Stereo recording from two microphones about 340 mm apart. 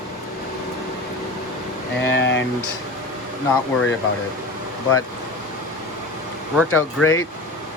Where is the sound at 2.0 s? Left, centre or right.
Left.